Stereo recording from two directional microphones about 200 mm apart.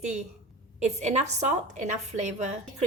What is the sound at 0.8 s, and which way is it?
A woman's voice, 35° right (ahead or behind).